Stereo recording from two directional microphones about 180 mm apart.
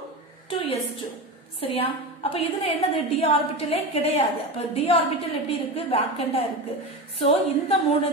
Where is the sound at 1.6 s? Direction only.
30° left (ahead or behind).